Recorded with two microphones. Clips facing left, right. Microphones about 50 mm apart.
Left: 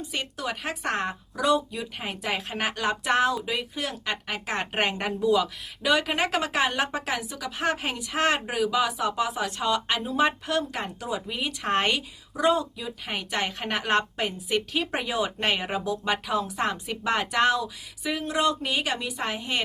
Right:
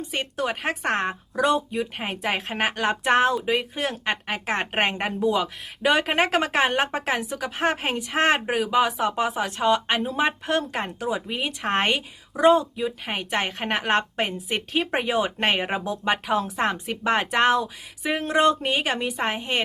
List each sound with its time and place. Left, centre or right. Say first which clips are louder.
0.1 s a woman's voice: right 5 dB; right